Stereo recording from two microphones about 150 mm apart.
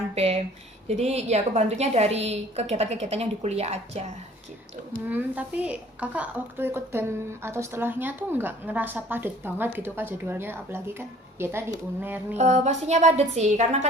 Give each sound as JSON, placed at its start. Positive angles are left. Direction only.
{"t": 0.1, "sound": "a sound", "side_deg": -45}
{"t": 0.9, "sound": "a woman's voice", "side_deg": -45}
{"t": 5.0, "sound": "a woman's voice", "side_deg": -10}
{"t": 12.4, "sound": "a woman's voice", "side_deg": -50}